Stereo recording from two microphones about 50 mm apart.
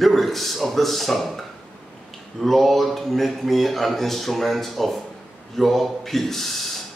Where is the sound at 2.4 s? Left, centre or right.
Centre.